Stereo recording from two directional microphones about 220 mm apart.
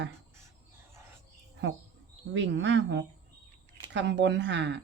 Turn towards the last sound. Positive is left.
turn(degrees=-55)  # may be behind; listen again after turning